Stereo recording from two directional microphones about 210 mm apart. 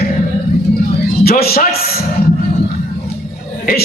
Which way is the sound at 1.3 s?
45° left (ahead or behind).